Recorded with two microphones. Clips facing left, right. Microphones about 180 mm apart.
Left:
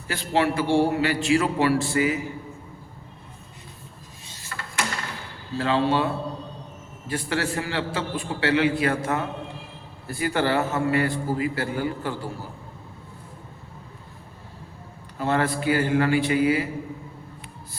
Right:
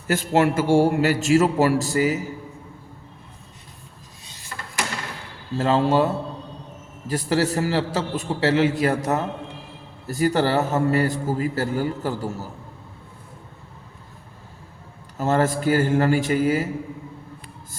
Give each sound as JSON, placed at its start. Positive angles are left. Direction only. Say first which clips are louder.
{"t": 0.1, "sound": "a man's voice", "louder": "right 4 dB", "side_deg": -45}
{"t": 5.5, "sound": "a man's voice", "louder": "right 3 dB", "side_deg": -45}
{"t": 7.1, "sound": "a man's voice", "louder": "right 5 dB", "side_deg": -40}
{"t": 15.2, "sound": "a man's voice", "louder": "right 3 dB", "side_deg": -45}